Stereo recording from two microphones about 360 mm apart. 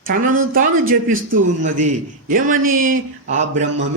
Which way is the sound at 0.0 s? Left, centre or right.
Right.